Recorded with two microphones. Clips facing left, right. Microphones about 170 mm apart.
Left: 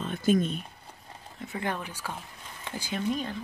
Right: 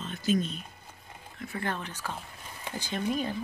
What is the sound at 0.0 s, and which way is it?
Speech, 55° left (ahead or behind).